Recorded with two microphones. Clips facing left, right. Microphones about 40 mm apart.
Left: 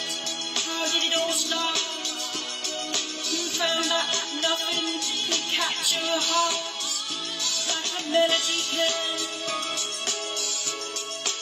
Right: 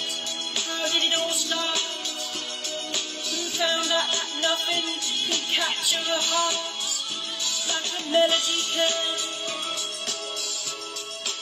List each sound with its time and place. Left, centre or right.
0.8 s speech: right
3.3 s music: right
5.3 s speech: right
7.4 s music: right
8.4 s speech: right